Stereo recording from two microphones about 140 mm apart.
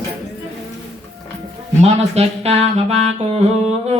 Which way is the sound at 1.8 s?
50° right (ahead or behind).